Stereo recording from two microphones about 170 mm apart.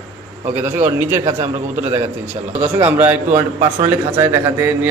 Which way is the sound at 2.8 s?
10° right (ahead or behind).